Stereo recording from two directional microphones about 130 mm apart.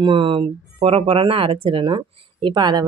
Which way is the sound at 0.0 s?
40° right (ahead or behind).